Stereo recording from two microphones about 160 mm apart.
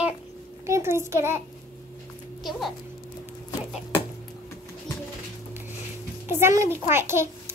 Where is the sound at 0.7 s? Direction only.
15° right (ahead or behind).